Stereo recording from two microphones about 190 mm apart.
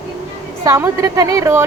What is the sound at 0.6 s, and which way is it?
A woman's voice, 15° right (ahead or behind).